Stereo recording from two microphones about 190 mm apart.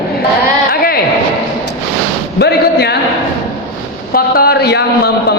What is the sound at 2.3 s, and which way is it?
Speech, 60° left (ahead or behind).